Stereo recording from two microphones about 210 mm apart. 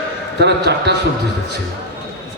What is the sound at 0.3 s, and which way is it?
Speech, 55° right (ahead or behind).